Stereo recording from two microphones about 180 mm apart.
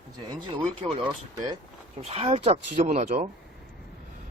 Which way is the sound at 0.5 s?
30° right (ahead or behind).